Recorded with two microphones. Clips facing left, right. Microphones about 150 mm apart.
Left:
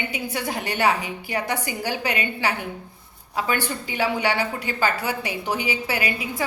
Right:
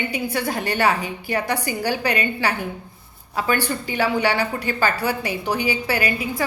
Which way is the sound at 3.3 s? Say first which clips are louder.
Right 3 dB; 20° left (ahead or behind).